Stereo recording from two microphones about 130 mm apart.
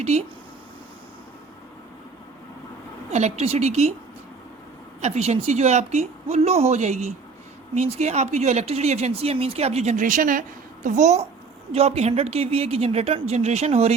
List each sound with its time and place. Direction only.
0.0 s speech: 55° right (ahead or behind)
3.1 s speech: 60° right (ahead or behind)
4.9 s speech: 60° right (ahead or behind); by 10.4 s 90° right
10.8 s a woman's voice: 65° right (ahead or behind)